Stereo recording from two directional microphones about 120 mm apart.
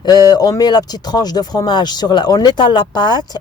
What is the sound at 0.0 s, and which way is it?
Speech, 35° left (ahead or behind).